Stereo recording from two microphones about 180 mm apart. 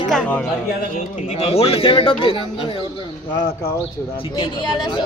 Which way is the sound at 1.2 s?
35° left (ahead or behind).